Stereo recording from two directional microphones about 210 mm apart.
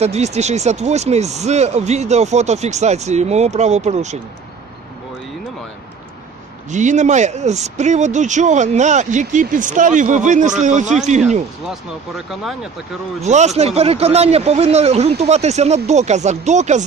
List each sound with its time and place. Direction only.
0.0 s speech: 30° right (ahead or behind)
6.7 s speech: 35° right (ahead or behind)
13.2 s speech: 35° right (ahead or behind)